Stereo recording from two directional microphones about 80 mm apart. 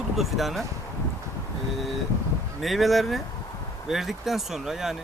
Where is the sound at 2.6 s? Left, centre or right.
Centre.